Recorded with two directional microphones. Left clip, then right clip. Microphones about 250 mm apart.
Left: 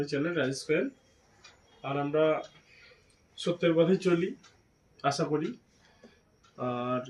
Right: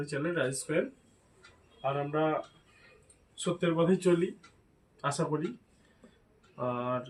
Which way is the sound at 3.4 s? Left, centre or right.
Centre.